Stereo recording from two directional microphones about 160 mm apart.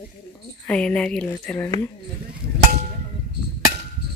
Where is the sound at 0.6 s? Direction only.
5° left (ahead or behind).